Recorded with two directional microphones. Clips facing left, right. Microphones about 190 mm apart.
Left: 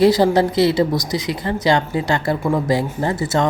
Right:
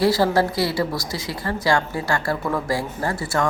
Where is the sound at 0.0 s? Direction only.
20° left (ahead or behind).